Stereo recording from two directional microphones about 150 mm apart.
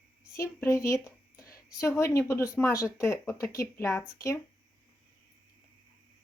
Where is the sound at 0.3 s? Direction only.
20° left (ahead or behind).